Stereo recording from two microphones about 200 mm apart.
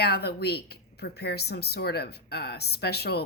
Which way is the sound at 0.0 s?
55° left (ahead or behind).